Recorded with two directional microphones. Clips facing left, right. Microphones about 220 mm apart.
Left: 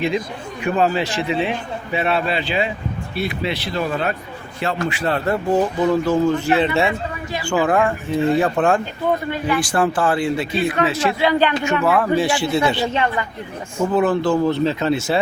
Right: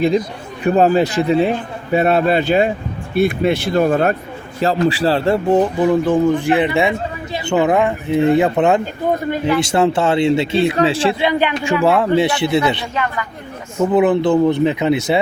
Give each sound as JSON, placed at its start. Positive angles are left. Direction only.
{"t": 0.6, "sound": "a man's voice", "side_deg": -40}
{"t": 4.6, "sound": "speech", "side_deg": -35}
{"t": 12.9, "sound": "speech", "side_deg": 25}
{"t": 13.9, "sound": "speech", "side_deg": -20}